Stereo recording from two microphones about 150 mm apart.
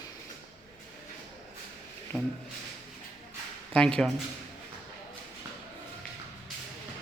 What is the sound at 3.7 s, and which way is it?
Speech, 5° left (ahead or behind).